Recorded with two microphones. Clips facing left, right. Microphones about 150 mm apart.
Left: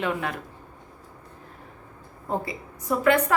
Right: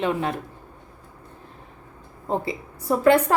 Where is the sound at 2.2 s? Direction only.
25° right (ahead or behind).